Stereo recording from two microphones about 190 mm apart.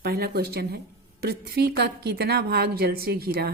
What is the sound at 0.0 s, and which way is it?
A woman's voice, 55° right (ahead or behind).